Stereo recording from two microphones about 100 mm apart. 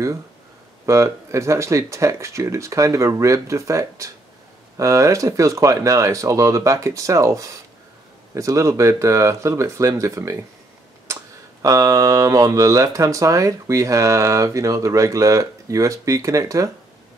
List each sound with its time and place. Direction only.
0.8 s speech: 30° right (ahead or behind)
11.1 s a sound: 30° right (ahead or behind)
11.6 s speech: 35° right (ahead or behind)